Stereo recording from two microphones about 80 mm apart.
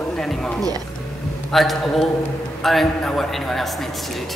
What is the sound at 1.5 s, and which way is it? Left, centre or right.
Speech, centre.